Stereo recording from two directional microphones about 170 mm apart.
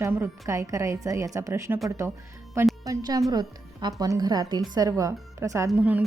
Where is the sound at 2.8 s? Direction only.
20° right (ahead or behind).